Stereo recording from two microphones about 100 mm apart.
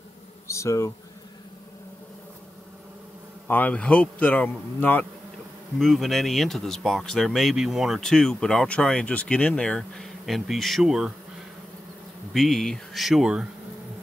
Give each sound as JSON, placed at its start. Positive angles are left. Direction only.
{"t": 0.5, "sound": "speech", "side_deg": 30}
{"t": 3.4, "sound": "speech", "side_deg": 20}
{"t": 5.8, "sound": "speech", "side_deg": 0}
{"t": 12.3, "sound": "speech", "side_deg": 0}